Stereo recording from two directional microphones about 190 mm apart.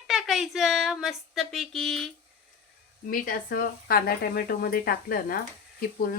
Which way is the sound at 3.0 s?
45° left (ahead or behind).